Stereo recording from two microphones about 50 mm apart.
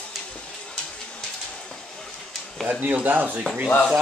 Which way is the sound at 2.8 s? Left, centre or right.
Right.